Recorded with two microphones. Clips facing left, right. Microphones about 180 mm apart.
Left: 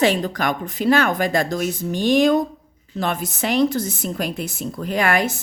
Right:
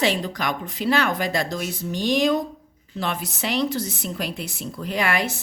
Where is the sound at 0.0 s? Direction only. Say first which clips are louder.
Left 4 dB; 50° left (ahead or behind).